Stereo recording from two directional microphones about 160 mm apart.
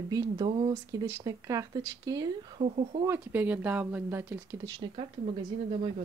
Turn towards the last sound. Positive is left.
turn(degrees=-40)  # may be behind; listen again after turning